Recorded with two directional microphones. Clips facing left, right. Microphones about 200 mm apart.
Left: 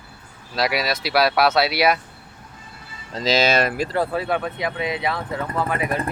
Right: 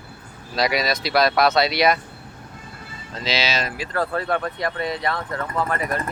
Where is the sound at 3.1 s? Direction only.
45° left (ahead or behind).